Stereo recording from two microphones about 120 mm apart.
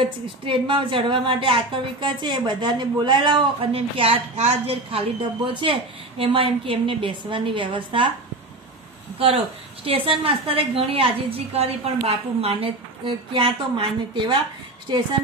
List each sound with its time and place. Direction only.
0.5 s a woman's voice: 45° right (ahead or behind)
3.7 s a woman's voice: 50° right (ahead or behind)
9.8 s a woman's voice: 50° right (ahead or behind)